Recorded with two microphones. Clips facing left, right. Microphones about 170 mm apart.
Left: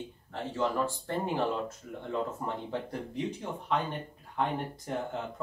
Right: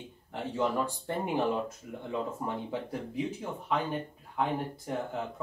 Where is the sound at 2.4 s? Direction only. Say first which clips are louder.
Even; 10° right (ahead or behind).